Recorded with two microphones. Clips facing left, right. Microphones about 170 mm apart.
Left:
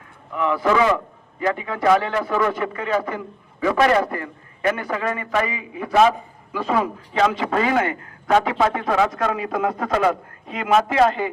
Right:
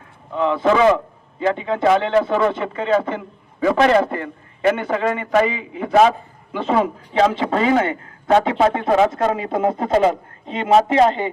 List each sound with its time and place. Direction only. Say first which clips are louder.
0.3 s a man's voice: right 3 dB; 25° right (ahead or behind)